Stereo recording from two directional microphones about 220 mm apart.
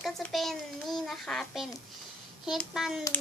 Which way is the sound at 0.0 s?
Centre (ahead or behind).